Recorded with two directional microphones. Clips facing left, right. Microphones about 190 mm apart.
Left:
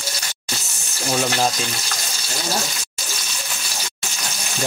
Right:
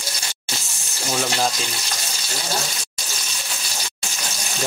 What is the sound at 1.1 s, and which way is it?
Frying, 10° left (ahead or behind).